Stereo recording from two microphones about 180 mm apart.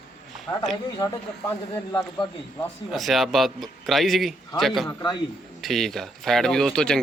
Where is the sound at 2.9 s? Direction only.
Centre (ahead or behind).